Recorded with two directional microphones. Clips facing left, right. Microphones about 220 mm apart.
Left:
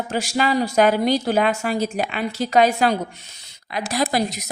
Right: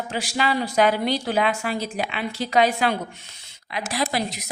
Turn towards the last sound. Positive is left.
turn(degrees=40)  # may be behind; listen again after turning